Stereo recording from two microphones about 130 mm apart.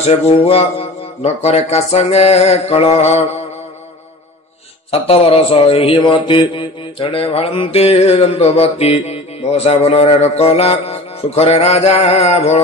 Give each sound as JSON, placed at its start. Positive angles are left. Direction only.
{"t": 0.0, "sound": "a man's voice", "side_deg": 50}
{"t": 4.9, "sound": "a man's voice", "side_deg": 50}